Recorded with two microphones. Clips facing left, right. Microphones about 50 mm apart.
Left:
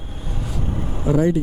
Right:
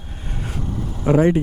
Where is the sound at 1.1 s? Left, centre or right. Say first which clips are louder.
Right 3 dB; right.